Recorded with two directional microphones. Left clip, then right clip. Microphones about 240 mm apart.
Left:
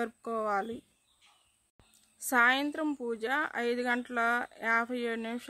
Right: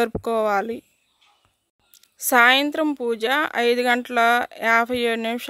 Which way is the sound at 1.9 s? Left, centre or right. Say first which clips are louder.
Right 10 dB; right.